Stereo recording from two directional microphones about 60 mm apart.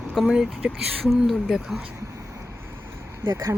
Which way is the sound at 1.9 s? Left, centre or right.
Right.